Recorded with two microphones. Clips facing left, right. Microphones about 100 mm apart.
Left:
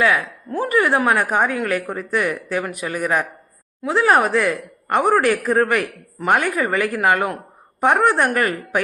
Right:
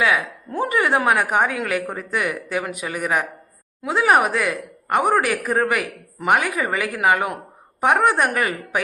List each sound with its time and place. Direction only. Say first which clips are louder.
0.0 s a woman's voice: left 2 dB; 20° right (ahead or behind)